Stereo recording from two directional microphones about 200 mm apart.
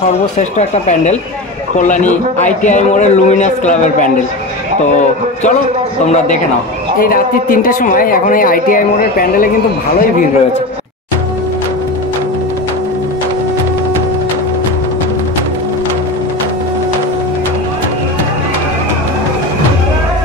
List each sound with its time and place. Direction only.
0.4 s a man's voice: 35° left (ahead or behind)
6.0 s a man's voice: 35° left (ahead or behind)
7.0 s speech: 45° left (ahead or behind)